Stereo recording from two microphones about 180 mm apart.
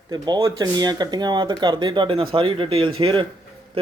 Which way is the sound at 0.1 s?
20° right (ahead or behind).